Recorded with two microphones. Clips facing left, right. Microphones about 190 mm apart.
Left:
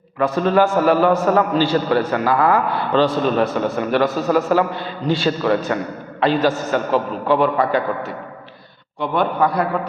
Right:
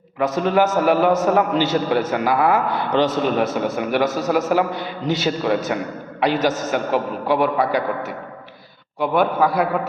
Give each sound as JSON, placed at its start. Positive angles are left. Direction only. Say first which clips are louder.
{"t": 0.2, "sound": "a man's voice", "louder": "left 2 dB", "side_deg": -15}